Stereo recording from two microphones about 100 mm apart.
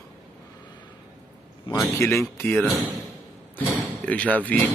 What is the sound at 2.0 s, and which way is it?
Speech, 25° left (ahead or behind).